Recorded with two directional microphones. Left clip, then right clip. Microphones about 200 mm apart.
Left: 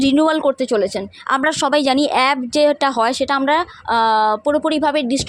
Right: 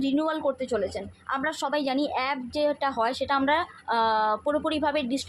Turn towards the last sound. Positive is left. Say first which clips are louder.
# left 9 dB
turn(degrees=40)  # may be behind; listen again after turning